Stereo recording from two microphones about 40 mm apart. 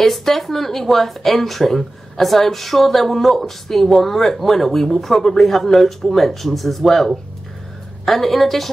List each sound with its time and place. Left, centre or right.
0.0 s speech: centre